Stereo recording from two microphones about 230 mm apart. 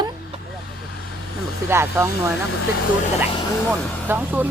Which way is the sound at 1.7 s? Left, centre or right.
Centre.